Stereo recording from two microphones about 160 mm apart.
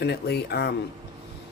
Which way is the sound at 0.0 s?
90° left.